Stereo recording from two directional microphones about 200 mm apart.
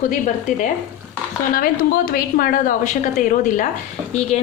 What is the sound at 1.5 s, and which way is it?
A woman's voice, 45° left (ahead or behind).